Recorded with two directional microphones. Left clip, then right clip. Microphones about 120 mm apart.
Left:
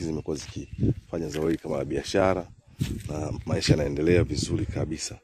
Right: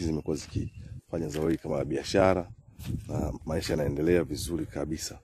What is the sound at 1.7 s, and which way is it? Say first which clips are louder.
Speech: left 2 dB; 25° right (ahead or behind).